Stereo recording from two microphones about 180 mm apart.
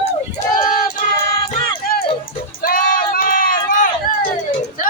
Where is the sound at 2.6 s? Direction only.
50° left (ahead or behind).